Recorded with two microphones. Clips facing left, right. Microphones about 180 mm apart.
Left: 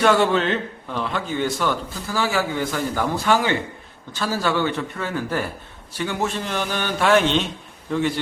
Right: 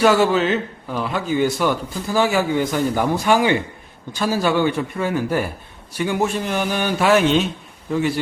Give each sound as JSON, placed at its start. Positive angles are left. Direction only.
{"t": 0.0, "sound": "a man's voice", "side_deg": -5}